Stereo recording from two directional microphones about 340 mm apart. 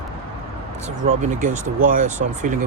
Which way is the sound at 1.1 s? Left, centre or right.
Right.